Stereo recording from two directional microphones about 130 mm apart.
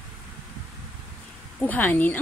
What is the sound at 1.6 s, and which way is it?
Speech, 15° left (ahead or behind).